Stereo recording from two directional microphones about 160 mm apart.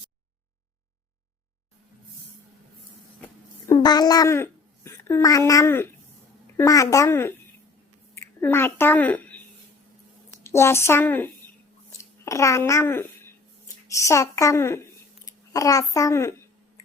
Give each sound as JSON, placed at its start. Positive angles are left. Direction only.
{"t": 3.8, "sound": "a woman's voice", "side_deg": 25}
{"t": 10.4, "sound": "a woman's voice", "side_deg": 15}